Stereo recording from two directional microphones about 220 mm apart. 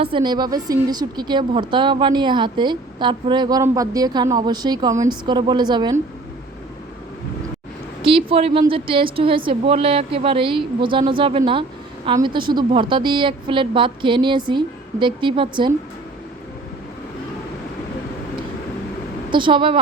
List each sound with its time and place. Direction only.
0.0 s a woman's voice: 20° right (ahead or behind)
8.0 s a woman's voice: 25° right (ahead or behind)
19.3 s a woman's voice: 20° right (ahead or behind)